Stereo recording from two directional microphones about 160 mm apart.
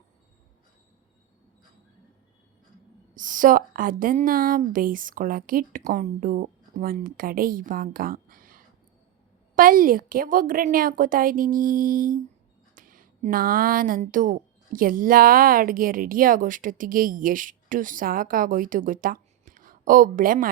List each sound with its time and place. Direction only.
3.2 s speech: 55° right (ahead or behind)